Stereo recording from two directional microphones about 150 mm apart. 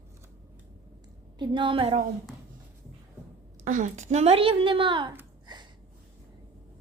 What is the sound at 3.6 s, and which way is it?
Speech, 60° right (ahead or behind).